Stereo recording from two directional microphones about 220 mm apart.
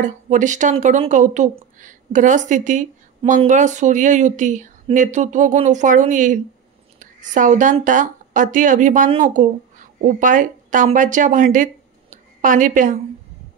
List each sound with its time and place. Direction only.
0.0 s a woman's voice: 35° right (ahead or behind)